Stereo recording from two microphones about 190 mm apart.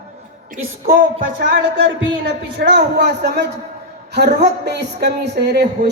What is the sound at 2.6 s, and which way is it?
A woman's voice, 65° right (ahead or behind).